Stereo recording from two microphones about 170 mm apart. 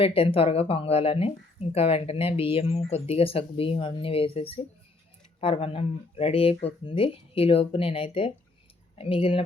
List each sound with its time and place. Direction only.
0.0 s speech: 35° left (ahead or behind)